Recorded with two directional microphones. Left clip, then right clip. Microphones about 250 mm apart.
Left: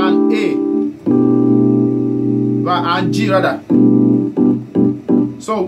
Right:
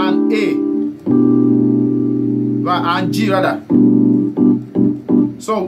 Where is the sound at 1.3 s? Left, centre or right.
Left.